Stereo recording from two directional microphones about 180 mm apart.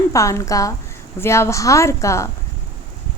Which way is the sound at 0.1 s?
15° left (ahead or behind).